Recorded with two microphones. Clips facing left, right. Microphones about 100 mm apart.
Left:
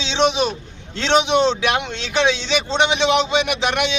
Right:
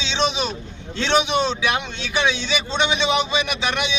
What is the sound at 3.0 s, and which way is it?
Speech, 65° left (ahead or behind).